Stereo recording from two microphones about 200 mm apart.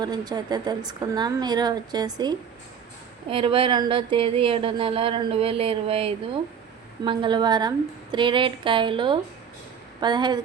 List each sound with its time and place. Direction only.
0.0 s speech: 20° right (ahead or behind)